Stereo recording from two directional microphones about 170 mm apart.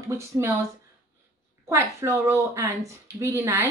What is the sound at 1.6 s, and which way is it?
A woman's voice, 15° right (ahead or behind).